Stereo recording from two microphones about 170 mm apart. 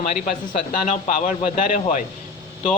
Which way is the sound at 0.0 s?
45° left (ahead or behind).